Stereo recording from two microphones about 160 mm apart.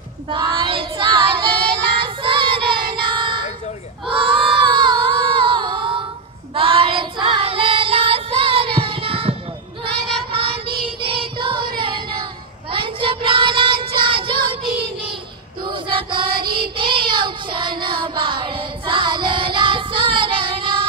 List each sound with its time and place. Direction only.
0.3 s child singing: 30° right (ahead or behind)
10.3 s child singing: 35° right (ahead or behind)
15.6 s female singing: 30° right (ahead or behind)
16.7 s child singing: 30° right (ahead or behind)